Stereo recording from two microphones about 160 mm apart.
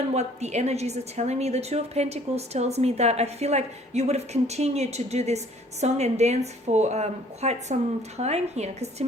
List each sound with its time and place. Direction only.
0.1 s a woman's voice: 45° right (ahead or behind)